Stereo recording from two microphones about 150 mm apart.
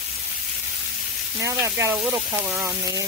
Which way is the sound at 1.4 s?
20° right (ahead or behind).